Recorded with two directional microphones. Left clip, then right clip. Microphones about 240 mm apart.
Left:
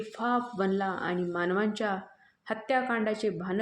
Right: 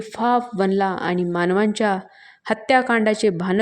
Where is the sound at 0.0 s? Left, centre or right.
Right.